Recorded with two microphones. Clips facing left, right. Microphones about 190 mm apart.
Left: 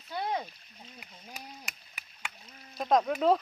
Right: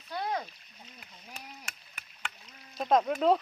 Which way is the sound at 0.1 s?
10° left (ahead or behind).